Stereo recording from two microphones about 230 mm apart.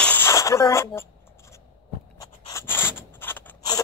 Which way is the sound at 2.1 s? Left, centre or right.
Centre.